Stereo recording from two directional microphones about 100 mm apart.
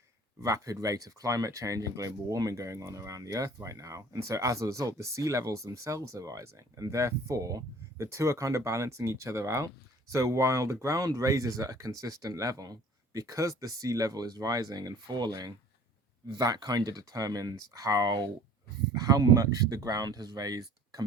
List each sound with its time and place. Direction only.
0.4 s speech: 35° right (ahead or behind)